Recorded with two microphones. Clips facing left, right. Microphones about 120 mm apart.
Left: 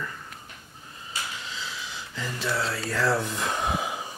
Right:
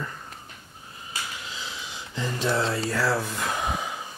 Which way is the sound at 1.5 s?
20° right (ahead or behind).